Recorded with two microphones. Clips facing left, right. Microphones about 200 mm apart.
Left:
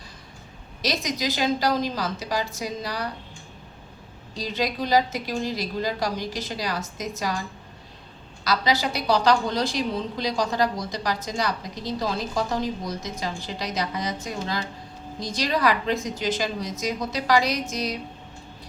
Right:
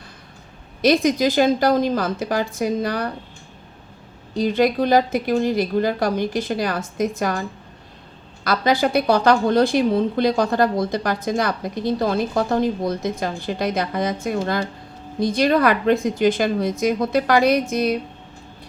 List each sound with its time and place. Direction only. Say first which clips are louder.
0.8 s a woman's voice: right 11 dB; 55° right (ahead or behind)
4.4 s a woman's voice: right 9 dB; 55° right (ahead or behind)
8.4 s a woman's voice: right 5 dB; 55° right (ahead or behind)